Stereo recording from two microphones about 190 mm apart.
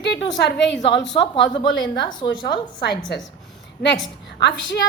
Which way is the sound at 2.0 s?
25° left (ahead or behind).